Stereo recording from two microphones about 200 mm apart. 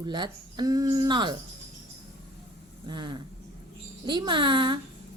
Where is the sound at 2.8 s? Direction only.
25° right (ahead or behind).